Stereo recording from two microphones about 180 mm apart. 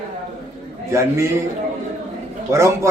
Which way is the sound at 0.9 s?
15° right (ahead or behind).